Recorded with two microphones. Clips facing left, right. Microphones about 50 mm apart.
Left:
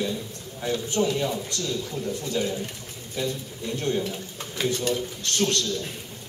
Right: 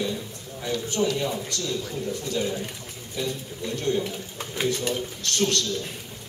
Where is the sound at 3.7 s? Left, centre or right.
Left.